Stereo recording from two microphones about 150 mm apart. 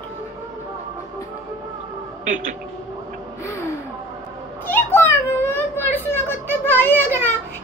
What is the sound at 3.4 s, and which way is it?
Gasp, 20° left (ahead or behind).